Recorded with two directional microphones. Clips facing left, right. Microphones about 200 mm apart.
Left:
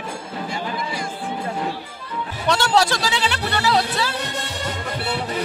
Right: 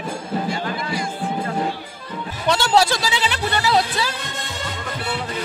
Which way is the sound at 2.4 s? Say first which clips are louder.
Right 1 dB; centre (ahead or behind).